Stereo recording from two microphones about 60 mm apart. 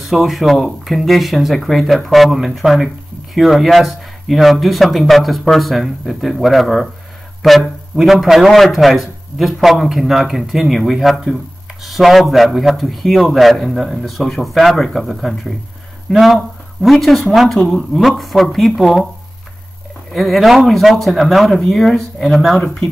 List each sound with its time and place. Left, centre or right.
0.0 s a man's voice: centre
20.1 s a man's voice: centre